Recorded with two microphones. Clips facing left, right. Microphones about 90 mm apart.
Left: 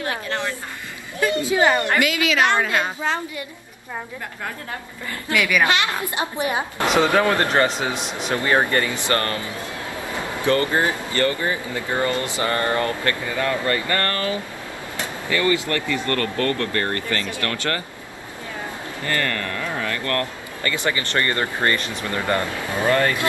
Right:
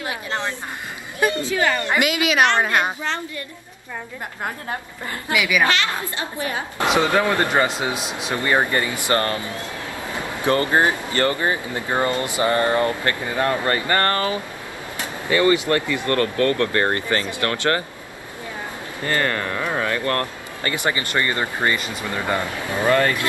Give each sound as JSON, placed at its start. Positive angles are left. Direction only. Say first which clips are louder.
{"t": 0.3, "sound": "speech", "louder": "right 3 dB", "side_deg": -20}
{"t": 1.3, "sound": "a woman's voice", "louder": "left 3 dB", "side_deg": 20}
{"t": 1.9, "sound": "speech", "louder": "even", "side_deg": -20}
{"t": 3.0, "sound": "a woman's voice", "louder": "left 2 dB", "side_deg": 15}
{"t": 5.3, "sound": "speech", "louder": "even", "side_deg": -10}
{"t": 5.6, "sound": "a woman's voice", "louder": "even", "side_deg": 20}
{"t": 7.2, "sound": "speech", "louder": "left 1 dB", "side_deg": -10}
{"t": 19.0, "sound": "speech", "louder": "right 3 dB", "side_deg": -30}
{"t": 19.6, "sound": "a sound", "louder": "right 5 dB", "side_deg": -50}
{"t": 19.9, "sound": "a sound", "louder": "right 2 dB", "side_deg": -30}
{"t": 20.7, "sound": "speech", "louder": "right 1 dB", "side_deg": -20}